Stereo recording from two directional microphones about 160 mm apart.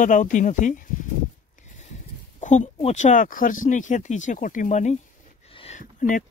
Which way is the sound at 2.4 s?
45° left (ahead or behind).